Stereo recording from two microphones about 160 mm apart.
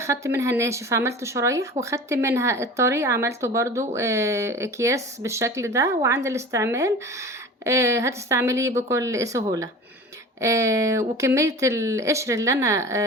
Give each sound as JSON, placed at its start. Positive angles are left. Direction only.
{"t": 0.0, "sound": "speech", "side_deg": -20}